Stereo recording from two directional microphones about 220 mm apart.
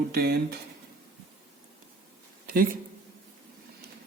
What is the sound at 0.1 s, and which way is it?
Speech, 45° right (ahead or behind).